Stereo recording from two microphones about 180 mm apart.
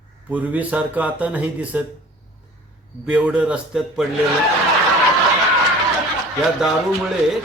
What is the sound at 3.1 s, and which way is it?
Speech, 10° right (ahead or behind).